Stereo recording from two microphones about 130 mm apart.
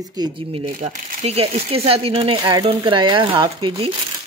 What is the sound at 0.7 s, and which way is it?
Speech, 90° right.